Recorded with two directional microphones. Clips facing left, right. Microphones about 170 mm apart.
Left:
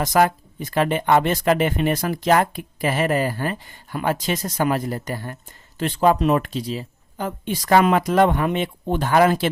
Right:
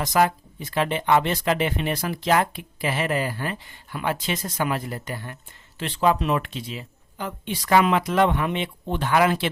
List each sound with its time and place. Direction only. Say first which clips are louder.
0.0 s speech: left 3 dB; 50° left (ahead or behind)